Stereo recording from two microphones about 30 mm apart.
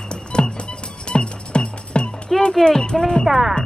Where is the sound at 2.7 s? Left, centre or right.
Left.